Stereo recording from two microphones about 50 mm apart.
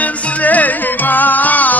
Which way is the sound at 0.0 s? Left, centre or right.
Left.